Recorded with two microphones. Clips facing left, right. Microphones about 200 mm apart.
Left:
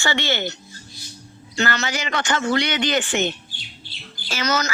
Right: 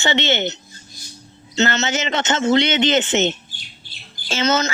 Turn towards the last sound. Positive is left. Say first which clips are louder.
# right 4 dB
turn(degrees=-25)  # may be behind; listen again after turning